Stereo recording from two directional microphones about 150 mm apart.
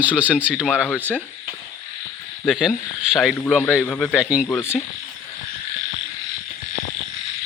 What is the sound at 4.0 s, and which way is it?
Speech, centre (ahead or behind).